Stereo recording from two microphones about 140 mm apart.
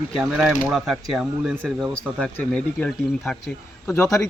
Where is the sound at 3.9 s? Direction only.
15° left (ahead or behind).